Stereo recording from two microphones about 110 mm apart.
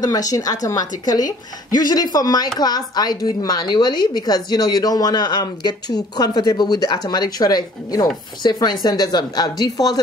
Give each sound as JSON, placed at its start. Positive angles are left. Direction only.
{"t": 0.0, "sound": "a woman's voice", "side_deg": 35}